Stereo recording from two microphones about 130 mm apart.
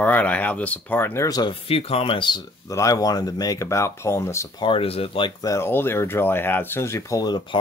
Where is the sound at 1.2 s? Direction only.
30° left (ahead or behind).